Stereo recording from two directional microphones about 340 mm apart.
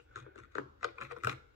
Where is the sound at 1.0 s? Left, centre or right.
Right.